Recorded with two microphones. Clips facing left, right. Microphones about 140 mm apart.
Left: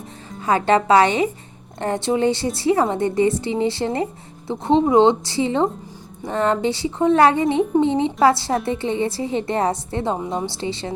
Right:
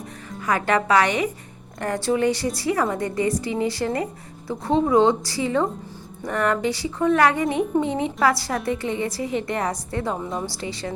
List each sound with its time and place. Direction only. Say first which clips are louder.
0.3 s a woman's voice: left 5 dB; 25° left (ahead or behind)